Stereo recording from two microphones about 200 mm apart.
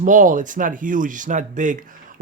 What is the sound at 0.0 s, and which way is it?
Speech, 40° right (ahead or behind).